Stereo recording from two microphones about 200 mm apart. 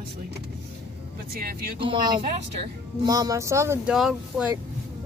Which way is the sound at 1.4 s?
45° right (ahead or behind).